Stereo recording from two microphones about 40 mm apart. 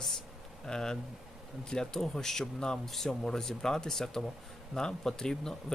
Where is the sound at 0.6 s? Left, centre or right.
Centre.